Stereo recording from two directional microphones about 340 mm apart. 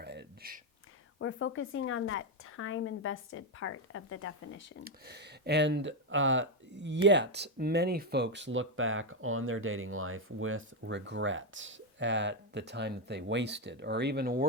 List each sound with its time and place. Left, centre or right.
0.0 s a sound: right
1.2 s speech: left
4.8 s speech: right